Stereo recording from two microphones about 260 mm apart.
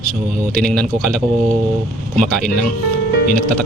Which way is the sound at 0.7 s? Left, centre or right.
Centre.